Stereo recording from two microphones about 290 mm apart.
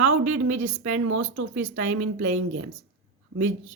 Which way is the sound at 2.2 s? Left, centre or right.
Right.